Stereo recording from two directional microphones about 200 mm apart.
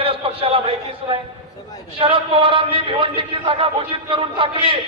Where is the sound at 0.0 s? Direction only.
30° right (ahead or behind).